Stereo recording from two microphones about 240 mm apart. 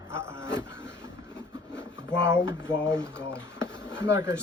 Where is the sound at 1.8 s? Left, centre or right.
Centre.